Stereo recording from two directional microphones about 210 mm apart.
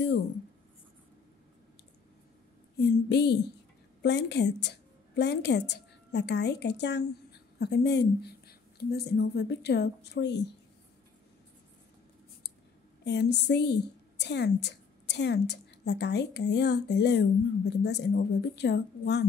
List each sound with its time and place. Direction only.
2.8 s a woman's voice: 55° left (ahead or behind)
13.0 s a woman's voice: 55° left (ahead or behind)